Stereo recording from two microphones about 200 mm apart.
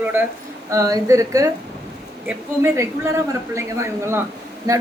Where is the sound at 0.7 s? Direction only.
15° right (ahead or behind).